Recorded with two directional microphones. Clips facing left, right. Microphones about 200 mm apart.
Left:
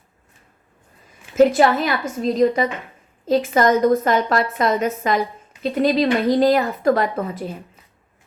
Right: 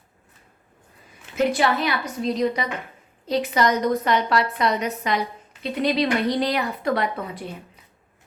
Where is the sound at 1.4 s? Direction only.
45° left (ahead or behind).